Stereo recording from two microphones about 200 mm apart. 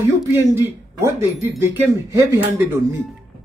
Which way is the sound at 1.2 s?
10° right (ahead or behind).